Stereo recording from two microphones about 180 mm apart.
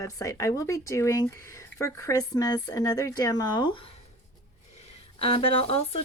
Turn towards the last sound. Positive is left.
turn(degrees=35)  # may be behind; listen again after turning